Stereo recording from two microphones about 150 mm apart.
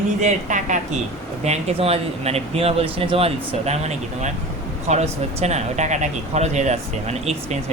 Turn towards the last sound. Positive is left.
turn(degrees=-45)  # may be behind; listen again after turning